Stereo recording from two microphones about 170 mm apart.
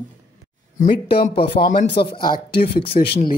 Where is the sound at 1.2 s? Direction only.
35° left (ahead or behind).